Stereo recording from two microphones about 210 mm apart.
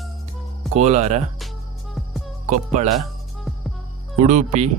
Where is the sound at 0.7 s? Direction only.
35° right (ahead or behind).